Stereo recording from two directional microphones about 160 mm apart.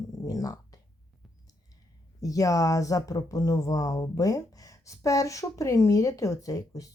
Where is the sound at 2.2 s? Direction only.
20° left (ahead or behind).